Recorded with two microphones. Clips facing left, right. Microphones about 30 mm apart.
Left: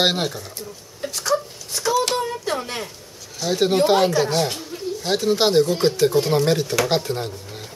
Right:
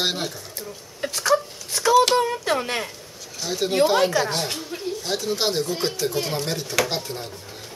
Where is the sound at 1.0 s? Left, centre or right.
Centre.